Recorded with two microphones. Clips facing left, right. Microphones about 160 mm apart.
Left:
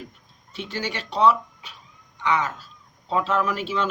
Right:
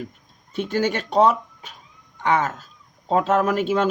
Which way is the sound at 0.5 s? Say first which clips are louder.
Right 8 dB; 50° right (ahead or behind).